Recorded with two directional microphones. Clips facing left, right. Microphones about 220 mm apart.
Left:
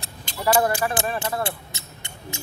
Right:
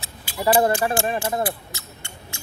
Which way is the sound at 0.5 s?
25° right (ahead or behind).